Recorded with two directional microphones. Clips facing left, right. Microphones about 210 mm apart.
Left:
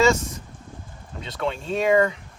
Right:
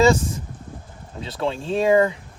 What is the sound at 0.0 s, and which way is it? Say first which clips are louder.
Speech: right 3 dB; 30° right (ahead or behind).